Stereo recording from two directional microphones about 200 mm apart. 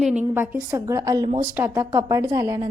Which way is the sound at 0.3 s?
15° right (ahead or behind).